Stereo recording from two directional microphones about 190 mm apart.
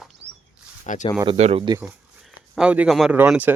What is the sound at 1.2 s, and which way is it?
Speech, 35° right (ahead or behind).